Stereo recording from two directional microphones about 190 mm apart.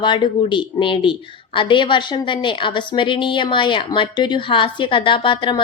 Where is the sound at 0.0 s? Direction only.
25° left (ahead or behind).